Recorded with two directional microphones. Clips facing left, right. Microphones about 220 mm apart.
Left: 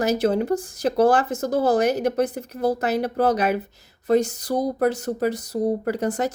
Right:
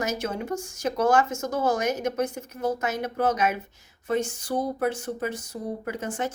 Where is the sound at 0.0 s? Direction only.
35° left (ahead or behind).